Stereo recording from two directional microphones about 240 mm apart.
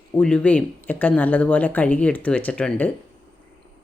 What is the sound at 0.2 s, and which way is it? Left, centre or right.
Speech, centre.